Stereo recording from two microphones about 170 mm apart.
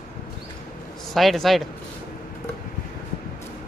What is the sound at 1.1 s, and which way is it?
Speech, centre (ahead or behind).